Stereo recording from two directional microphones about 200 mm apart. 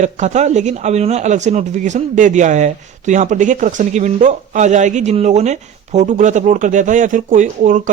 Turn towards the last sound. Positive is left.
turn(degrees=-40)  # may be behind; listen again after turning